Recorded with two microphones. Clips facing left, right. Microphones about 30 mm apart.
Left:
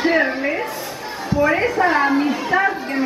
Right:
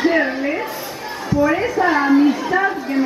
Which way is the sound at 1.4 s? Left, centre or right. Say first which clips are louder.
Even; centre.